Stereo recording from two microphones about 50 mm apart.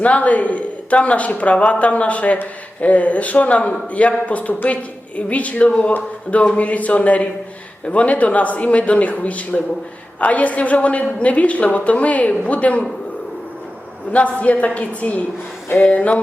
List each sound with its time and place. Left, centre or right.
0.0 s a man's voice: left
14.1 s a man's voice: left